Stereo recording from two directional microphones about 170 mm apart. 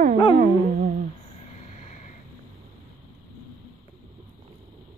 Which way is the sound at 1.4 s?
45° left (ahead or behind).